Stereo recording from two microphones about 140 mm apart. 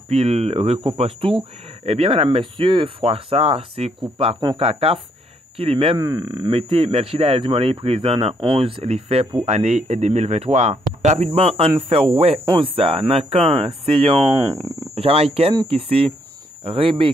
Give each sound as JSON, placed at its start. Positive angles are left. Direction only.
{"t": 0.1, "sound": "speech", "side_deg": -50}
{"t": 5.9, "sound": "speech", "side_deg": -30}
{"t": 14.3, "sound": "speech", "side_deg": -20}
{"t": 15.0, "sound": "speech", "side_deg": -45}